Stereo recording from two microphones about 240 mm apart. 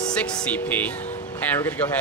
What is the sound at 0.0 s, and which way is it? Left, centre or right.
A man's voice, centre.